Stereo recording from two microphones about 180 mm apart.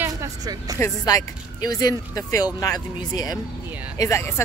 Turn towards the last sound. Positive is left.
turn(degrees=15)  # may be behind; listen again after turning